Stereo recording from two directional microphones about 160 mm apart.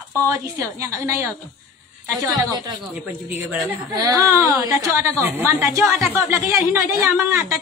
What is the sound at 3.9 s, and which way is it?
A woman's voice, 20° right (ahead or behind).